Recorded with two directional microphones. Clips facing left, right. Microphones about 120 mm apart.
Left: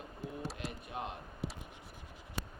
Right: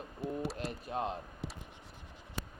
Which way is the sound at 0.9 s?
30° right (ahead or behind).